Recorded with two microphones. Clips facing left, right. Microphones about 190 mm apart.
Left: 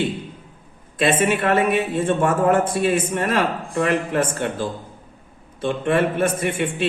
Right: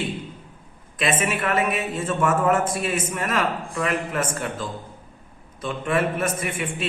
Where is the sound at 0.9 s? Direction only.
30° left (ahead or behind).